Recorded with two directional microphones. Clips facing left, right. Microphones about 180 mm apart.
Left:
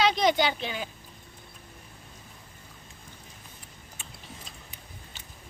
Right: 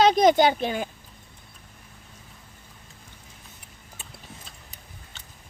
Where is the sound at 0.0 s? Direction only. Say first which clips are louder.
Right 6 dB; 45° right (ahead or behind).